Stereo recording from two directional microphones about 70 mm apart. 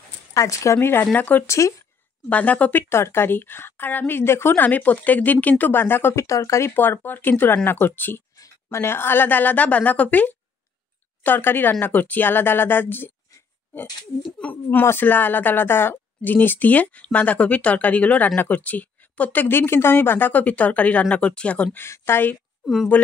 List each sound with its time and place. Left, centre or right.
0.3 s speech: left
0.7 s a woman's voice: left
1.5 s speech: left
2.2 s speech: left
2.9 s a woman's voice: left
6.2 s speech: left
6.7 s speech: left
14.4 s speech: left
21.7 s a woman's voice: left